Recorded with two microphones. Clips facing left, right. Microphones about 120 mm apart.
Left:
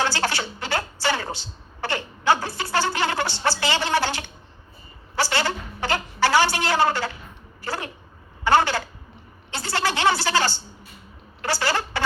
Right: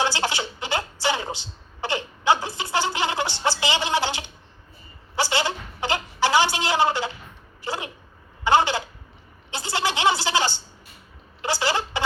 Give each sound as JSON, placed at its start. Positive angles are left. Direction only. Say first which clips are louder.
{"t": 0.0, "sound": "a woman's voice", "louder": "even", "side_deg": -15}